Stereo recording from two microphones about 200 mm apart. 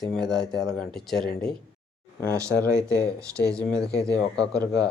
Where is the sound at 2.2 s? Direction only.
15° right (ahead or behind).